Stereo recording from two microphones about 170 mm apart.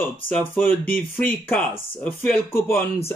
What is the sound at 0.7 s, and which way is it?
Speech, 55° left (ahead or behind).